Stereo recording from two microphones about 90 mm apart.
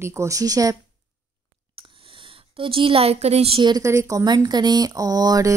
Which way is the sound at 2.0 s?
85° right.